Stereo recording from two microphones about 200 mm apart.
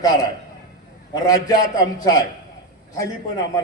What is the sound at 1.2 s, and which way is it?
Speech, 20° left (ahead or behind).